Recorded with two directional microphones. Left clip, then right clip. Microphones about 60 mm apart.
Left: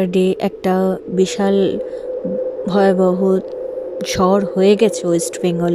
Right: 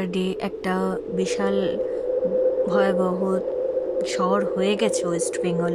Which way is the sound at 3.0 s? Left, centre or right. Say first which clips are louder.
Left 7 dB; left.